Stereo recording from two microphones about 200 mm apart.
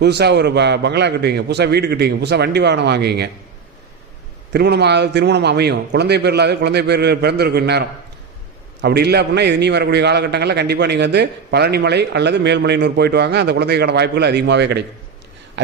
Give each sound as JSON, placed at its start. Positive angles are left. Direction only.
{"t": 0.0, "sound": "a man's voice", "side_deg": -55}
{"t": 4.5, "sound": "a man's voice", "side_deg": -55}
{"t": 15.6, "sound": "a sound", "side_deg": -60}